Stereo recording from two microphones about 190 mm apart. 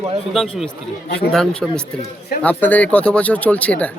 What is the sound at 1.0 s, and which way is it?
Speech, 60° left (ahead or behind).